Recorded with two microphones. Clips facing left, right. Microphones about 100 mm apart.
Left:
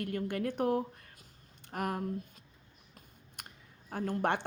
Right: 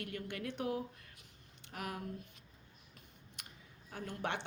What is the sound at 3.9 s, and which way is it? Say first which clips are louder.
Speech: left 8 dB; 50° left (ahead or behind).